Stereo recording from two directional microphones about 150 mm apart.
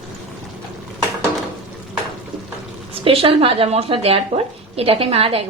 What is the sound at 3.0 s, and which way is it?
Speech, 40° right (ahead or behind).